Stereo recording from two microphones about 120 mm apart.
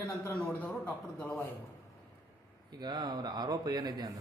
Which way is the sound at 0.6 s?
15° left (ahead or behind).